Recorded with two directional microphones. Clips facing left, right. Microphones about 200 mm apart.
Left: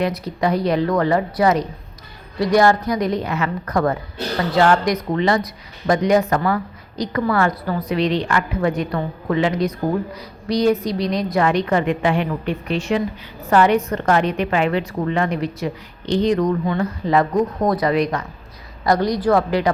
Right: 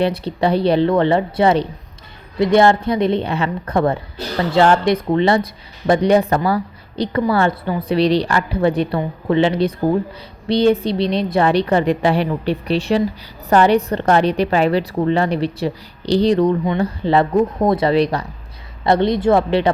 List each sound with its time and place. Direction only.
0.0 s a woman's voice: 30° right (ahead or behind)